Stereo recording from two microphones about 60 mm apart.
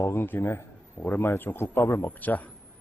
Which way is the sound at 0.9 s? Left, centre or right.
Left.